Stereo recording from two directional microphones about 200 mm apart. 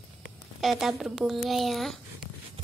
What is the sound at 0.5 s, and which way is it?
Speech, centre (ahead or behind).